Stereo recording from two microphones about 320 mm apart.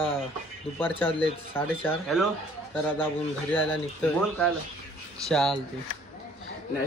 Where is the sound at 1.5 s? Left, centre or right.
Centre.